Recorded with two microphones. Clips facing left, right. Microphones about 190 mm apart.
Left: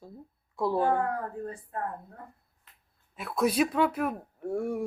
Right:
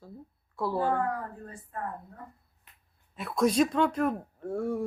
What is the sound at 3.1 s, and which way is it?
Speech, centre (ahead or behind).